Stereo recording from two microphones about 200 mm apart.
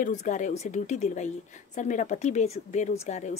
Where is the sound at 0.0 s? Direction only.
40° left (ahead or behind).